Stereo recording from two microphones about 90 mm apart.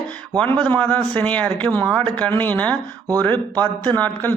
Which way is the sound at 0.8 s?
15° left (ahead or behind).